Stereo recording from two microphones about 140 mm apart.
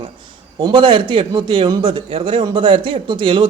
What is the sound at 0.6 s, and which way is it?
A man's voice, 35° right (ahead or behind).